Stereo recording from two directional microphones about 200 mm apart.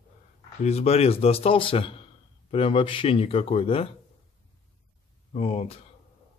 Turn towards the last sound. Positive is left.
turn(degrees=30)  # may be behind; listen again after turning